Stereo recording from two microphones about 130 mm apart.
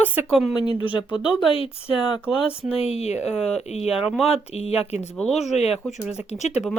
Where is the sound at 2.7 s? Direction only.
50° left (ahead or behind).